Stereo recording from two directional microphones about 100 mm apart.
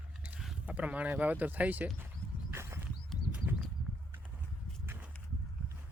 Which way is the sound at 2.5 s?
25° right (ahead or behind).